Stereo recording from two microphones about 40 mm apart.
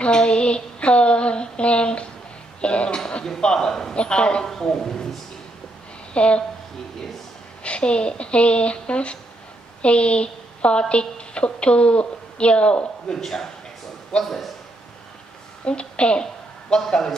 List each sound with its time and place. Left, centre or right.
0.0 s a sound: left
2.6 s cough: left
3.3 s a man's voice: centre
3.9 s speech: left
4.6 s speech: centre
6.1 s speech: left
7.6 s a woman's voice: left
13.2 s a man's voice: centre
15.6 s a woman's voice: left
16.8 s a man's voice: centre